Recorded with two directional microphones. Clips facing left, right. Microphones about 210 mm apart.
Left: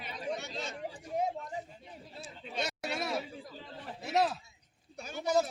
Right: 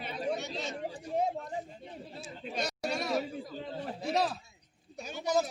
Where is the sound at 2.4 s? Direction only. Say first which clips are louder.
Right 2 dB; centre (ahead or behind).